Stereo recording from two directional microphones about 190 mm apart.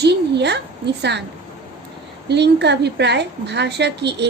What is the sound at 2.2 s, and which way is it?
A woman's voice, 60° right (ahead or behind).